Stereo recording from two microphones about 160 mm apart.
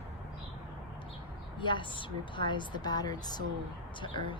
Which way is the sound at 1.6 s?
30° left (ahead or behind).